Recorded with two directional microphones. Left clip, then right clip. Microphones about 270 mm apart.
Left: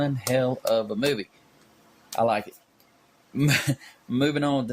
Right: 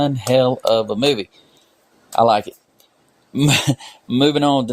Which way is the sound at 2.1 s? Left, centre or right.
Right.